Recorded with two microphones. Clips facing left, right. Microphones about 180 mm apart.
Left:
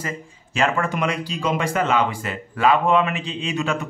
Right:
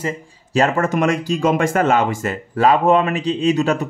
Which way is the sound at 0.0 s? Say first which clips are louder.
Right 5 dB; 40° right (ahead or behind).